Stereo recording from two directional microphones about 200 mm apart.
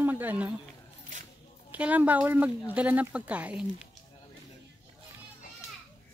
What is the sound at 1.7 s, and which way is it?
Speech, 5° right (ahead or behind).